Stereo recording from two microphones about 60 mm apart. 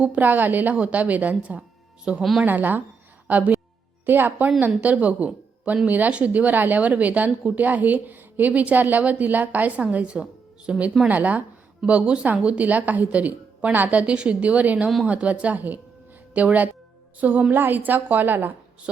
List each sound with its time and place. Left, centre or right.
0.0 s a woman's voice: right
2.4 s a woman's voice: right